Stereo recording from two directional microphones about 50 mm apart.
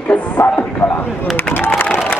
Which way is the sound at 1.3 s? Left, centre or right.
Left.